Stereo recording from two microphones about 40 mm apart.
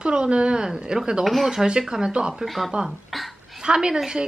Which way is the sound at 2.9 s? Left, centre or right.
Centre.